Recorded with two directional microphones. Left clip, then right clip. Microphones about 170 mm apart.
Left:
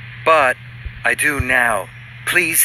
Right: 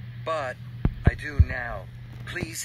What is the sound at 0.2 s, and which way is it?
Speech, 45° left (ahead or behind).